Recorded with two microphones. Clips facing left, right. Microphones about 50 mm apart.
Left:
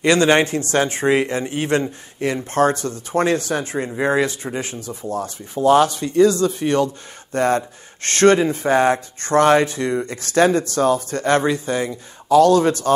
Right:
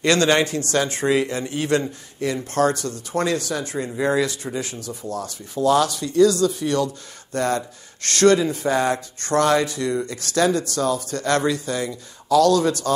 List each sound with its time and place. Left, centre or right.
0.0 s a man's voice: left